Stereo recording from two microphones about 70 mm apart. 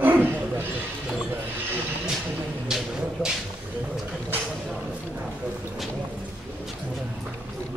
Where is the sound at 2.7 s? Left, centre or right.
Centre.